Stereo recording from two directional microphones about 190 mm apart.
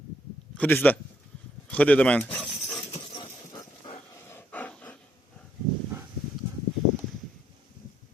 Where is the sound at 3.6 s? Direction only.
15° left (ahead or behind).